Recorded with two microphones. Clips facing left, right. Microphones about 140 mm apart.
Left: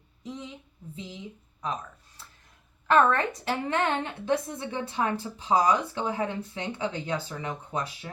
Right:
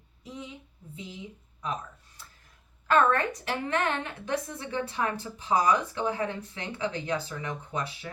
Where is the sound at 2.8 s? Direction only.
25° left (ahead or behind).